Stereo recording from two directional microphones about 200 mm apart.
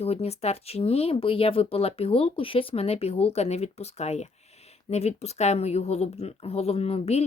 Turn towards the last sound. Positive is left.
turn(degrees=30)  # may be behind; listen again after turning